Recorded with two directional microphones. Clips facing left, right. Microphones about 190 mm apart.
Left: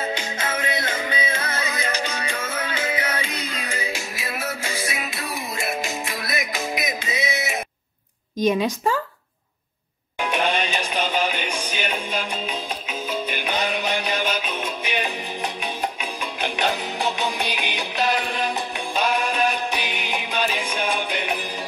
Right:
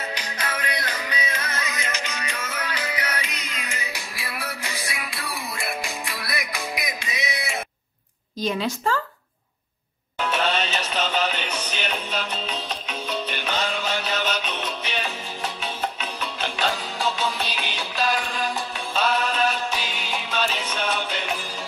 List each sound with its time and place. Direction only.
0.0 s music: 25° left (ahead or behind)
8.4 s speech: 20° left (ahead or behind)
10.2 s music: 15° left (ahead or behind)